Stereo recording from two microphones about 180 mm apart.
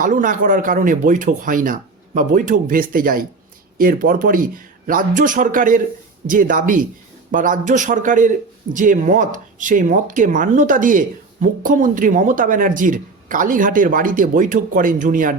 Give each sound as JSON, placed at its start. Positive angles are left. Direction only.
{"t": 0.0, "sound": "speech", "side_deg": -50}